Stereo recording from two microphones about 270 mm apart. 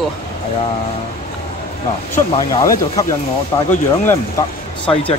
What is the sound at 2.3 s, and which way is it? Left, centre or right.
Speech, centre.